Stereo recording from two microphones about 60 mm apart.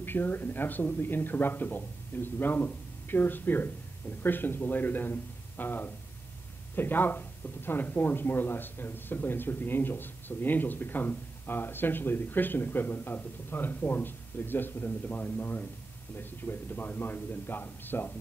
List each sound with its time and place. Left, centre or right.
0.0 s speech: left